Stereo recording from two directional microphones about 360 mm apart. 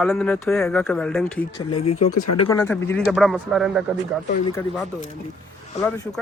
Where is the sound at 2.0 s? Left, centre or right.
Left.